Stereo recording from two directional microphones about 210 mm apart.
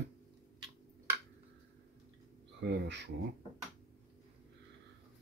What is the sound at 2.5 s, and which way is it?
Speech, 55° right (ahead or behind).